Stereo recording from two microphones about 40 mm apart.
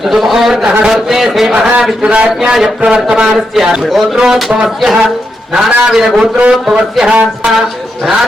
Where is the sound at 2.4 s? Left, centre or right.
Centre.